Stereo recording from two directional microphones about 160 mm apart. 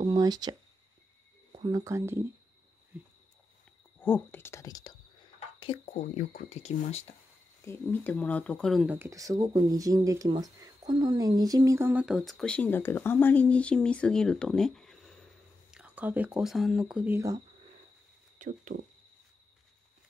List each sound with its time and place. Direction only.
0.0 s a sound: 25° right (ahead or behind)
1.6 s speech: 25° right (ahead or behind)
4.0 s speech: 10° left (ahead or behind)
5.6 s speech: 40° left (ahead or behind)
7.6 s speech: 15° left (ahead or behind)
8.8 s speech: 15° right (ahead or behind); by 15.1 s centre (ahead or behind)
15.7 s speech: 10° right (ahead or behind)
18.4 s speech: 50° right (ahead or behind)